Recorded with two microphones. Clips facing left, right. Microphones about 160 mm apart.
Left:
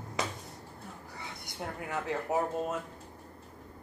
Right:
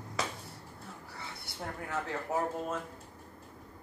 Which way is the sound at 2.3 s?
20° left (ahead or behind).